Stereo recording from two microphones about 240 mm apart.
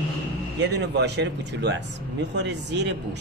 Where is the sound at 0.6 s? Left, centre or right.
Right.